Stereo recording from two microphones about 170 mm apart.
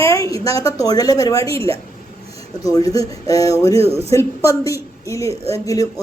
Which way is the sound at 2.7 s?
20° left (ahead or behind).